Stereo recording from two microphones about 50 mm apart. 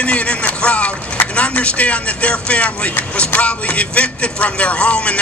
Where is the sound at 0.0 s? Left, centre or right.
Left.